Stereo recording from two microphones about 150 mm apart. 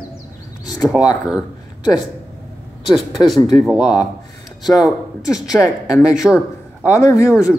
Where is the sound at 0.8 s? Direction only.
5° right (ahead or behind).